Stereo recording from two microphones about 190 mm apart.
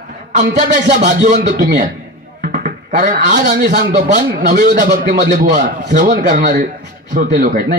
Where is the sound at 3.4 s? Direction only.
60° right (ahead or behind).